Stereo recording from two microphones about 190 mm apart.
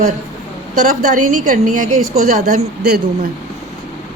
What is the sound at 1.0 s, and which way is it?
A woman's voice, 40° right (ahead or behind).